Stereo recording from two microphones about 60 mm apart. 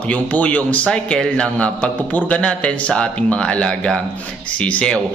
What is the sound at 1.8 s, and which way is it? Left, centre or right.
Speech, left.